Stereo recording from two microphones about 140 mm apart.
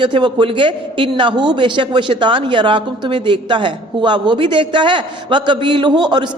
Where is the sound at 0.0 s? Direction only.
35° right (ahead or behind).